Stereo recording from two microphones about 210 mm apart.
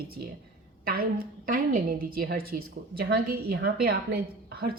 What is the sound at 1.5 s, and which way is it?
A woman's voice, 45° right (ahead or behind).